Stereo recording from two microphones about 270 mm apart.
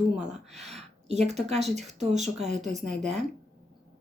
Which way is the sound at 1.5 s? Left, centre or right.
Right.